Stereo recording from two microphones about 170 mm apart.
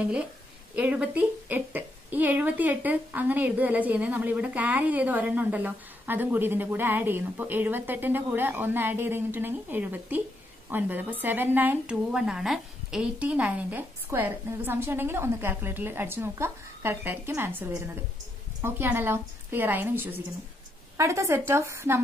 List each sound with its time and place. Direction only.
0.7 s a woman's voice: 10° right (ahead or behind)